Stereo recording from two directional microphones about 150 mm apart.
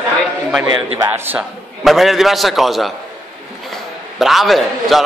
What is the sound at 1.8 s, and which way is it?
Speech, centre (ahead or behind).